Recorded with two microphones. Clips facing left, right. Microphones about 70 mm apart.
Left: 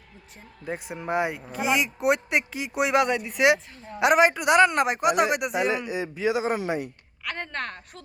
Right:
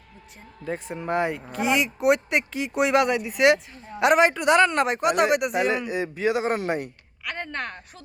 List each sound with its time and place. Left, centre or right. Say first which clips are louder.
0.6 s speech: right 2 dB; centre
5.5 s a man's voice: right 2 dB; right
7.3 s speech: right 1 dB; centre